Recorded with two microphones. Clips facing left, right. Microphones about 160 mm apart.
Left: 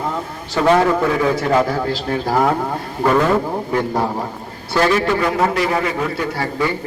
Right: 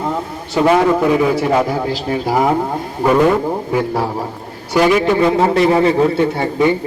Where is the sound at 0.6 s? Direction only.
10° right (ahead or behind).